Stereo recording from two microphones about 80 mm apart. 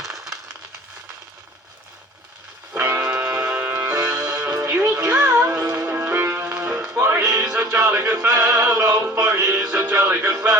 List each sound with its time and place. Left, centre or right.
2.8 s music: right
4.0 s music: centre
4.8 s music: right
5.0 s music: centre
6.9 s music: right
7.3 s music: centre
8.8 s music: right